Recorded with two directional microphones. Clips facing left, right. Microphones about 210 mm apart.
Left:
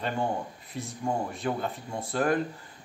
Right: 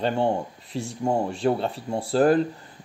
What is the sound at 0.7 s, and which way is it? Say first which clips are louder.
Speech: right 7 dB; 75° right (ahead or behind).